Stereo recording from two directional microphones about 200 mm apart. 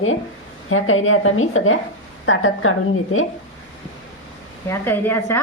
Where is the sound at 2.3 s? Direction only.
75° left (ahead or behind).